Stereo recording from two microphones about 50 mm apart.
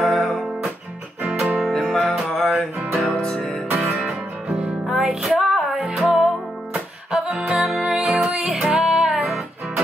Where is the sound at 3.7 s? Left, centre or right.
Right.